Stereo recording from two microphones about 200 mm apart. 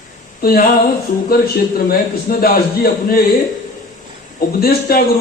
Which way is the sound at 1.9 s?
45° left (ahead or behind).